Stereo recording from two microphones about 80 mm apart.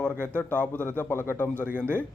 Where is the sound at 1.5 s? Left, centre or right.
Right.